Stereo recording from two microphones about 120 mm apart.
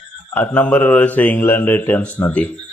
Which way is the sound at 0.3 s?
15° left (ahead or behind).